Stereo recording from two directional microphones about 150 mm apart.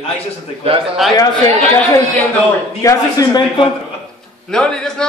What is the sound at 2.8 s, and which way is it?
Speech, 20° left (ahead or behind).